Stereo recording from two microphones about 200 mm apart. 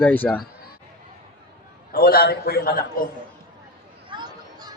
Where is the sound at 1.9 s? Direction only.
50° left (ahead or behind).